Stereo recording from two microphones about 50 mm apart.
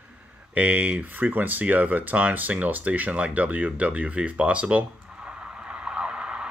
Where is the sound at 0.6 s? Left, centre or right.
Right.